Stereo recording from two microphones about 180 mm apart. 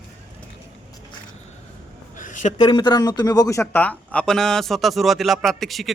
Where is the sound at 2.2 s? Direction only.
45° left (ahead or behind).